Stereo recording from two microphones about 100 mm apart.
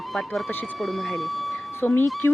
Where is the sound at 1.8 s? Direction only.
20° left (ahead or behind).